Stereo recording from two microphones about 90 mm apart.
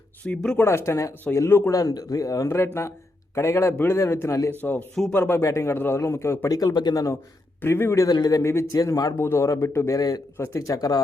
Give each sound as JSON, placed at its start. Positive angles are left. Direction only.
{"t": 0.3, "sound": "speech", "side_deg": 15}
{"t": 0.6, "sound": "a man's voice", "side_deg": 30}
{"t": 1.7, "sound": "speech", "side_deg": 45}
{"t": 4.5, "sound": "a man's voice", "side_deg": 20}
{"t": 6.5, "sound": "speech", "side_deg": 45}
{"t": 7.6, "sound": "a man's voice", "side_deg": 25}
{"t": 8.0, "sound": "speech", "side_deg": 45}
{"t": 8.4, "sound": "speech", "side_deg": 30}
{"t": 8.7, "sound": "speech", "side_deg": 40}
{"t": 9.1, "sound": "speech", "side_deg": 30}
{"t": 10.3, "sound": "speech", "side_deg": 30}
{"t": 10.8, "sound": "speech", "side_deg": 45}